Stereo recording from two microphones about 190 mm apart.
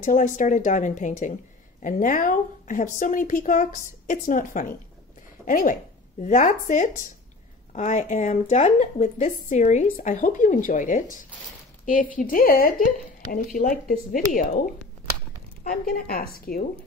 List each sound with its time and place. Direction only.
0.0 s speech: 40° left (ahead or behind)
15.6 s speech: 50° left (ahead or behind)